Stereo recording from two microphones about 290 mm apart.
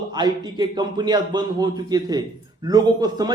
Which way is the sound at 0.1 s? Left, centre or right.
Centre.